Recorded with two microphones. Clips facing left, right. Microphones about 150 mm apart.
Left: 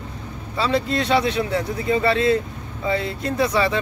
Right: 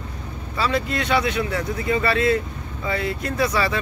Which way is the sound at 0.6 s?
30° left (ahead or behind).